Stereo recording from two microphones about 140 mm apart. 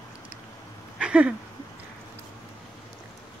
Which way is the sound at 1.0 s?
10° right (ahead or behind).